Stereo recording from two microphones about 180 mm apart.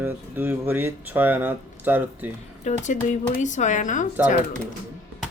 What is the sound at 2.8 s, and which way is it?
Speech, 40° left (ahead or behind).